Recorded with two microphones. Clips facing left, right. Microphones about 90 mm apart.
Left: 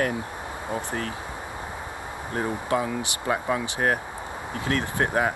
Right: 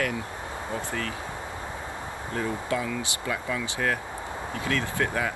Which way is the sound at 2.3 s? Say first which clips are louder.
Left 3 dB; 35° left (ahead or behind).